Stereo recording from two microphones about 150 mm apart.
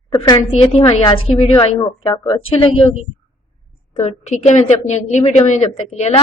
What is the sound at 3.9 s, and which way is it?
A woman's voice, 50° left (ahead or behind).